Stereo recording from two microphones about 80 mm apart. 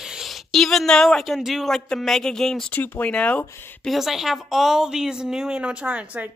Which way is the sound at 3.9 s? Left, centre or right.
Centre.